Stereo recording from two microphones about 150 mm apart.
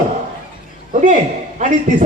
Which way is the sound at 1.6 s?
50° right (ahead or behind).